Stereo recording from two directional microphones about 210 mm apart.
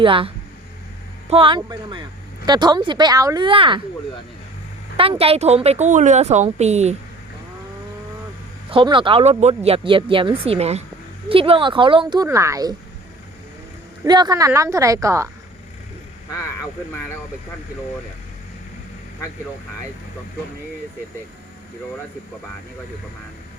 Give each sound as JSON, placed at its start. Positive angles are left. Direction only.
{"t": 0.0, "sound": "a woman's voice", "side_deg": -25}
{"t": 1.3, "sound": "a woman's voice", "side_deg": -25}
{"t": 4.9, "sound": "a woman's voice", "side_deg": -25}
{"t": 8.7, "sound": "a woman's voice", "side_deg": -25}
{"t": 14.0, "sound": "a woman's voice", "side_deg": -20}